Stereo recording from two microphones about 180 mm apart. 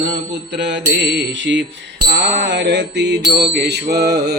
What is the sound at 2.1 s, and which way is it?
Mantra, 80° right.